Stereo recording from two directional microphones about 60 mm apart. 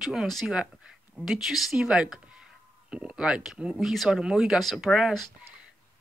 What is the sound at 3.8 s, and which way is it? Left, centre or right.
Speech, centre.